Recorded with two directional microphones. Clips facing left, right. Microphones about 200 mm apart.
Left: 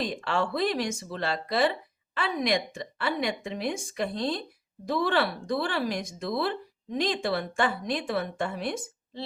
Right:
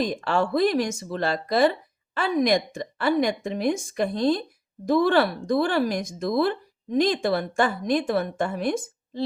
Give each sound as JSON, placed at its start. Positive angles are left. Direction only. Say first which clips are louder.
{"t": 0.0, "sound": "a woman's voice", "louder": "right 5 dB", "side_deg": -45}